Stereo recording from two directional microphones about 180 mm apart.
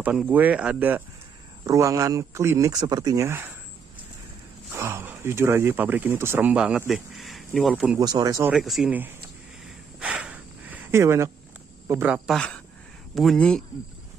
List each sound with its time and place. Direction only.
0.0 s a man's voice: 10° right (ahead or behind)
4.7 s speech: 15° right (ahead or behind)
8.0 s speech: 20° right (ahead or behind)
8.5 s speech: centre (ahead or behind)
9.9 s a sound: 5° right (ahead or behind)
11.9 s a man's voice: 10° right (ahead or behind)
12.3 s speech: 5° left (ahead or behind)